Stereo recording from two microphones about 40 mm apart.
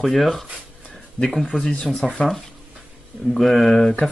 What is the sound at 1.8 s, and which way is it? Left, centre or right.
Speech, centre.